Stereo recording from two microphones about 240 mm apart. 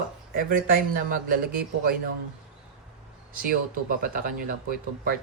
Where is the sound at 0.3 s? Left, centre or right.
Right.